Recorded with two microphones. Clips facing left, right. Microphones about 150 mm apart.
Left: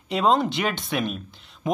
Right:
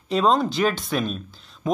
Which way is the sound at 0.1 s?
20° left (ahead or behind).